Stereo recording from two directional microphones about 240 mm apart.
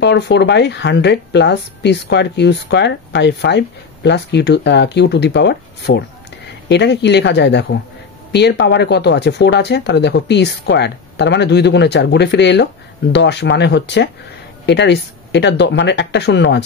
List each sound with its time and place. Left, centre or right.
0.0 s speech: left